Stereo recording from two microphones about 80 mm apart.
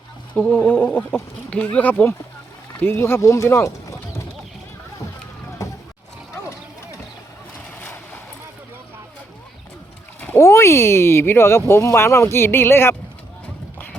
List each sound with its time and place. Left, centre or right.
0.3 s speech: left
5.6 s a sound: left
7.8 s vehicle: left
10.2 s speech: left